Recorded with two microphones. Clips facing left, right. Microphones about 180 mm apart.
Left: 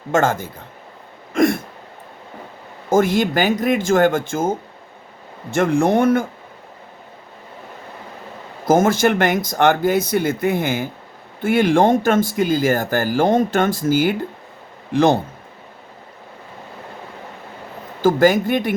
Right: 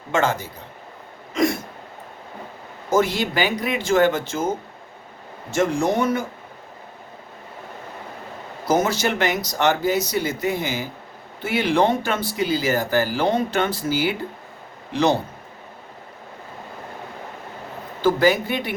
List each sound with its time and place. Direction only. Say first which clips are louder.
0.1 s speech: left 4 dB; 50° left (ahead or behind)
1.3 s throat clearing: left 4 dB; 55° left (ahead or behind)
2.9 s speech: left 4 dB; 50° left (ahead or behind)
8.6 s speech: left 5 dB; 50° left (ahead or behind)
18.0 s speech: left 4 dB; 45° left (ahead or behind)